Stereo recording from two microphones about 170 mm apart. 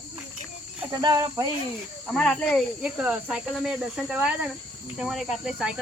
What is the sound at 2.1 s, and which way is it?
Speech, 5° left (ahead or behind).